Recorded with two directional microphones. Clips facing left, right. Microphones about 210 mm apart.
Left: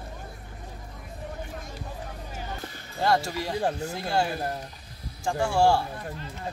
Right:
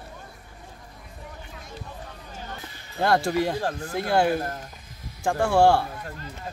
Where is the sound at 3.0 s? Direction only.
55° right (ahead or behind).